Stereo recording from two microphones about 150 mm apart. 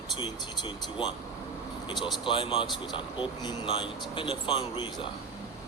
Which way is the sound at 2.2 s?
35° left (ahead or behind).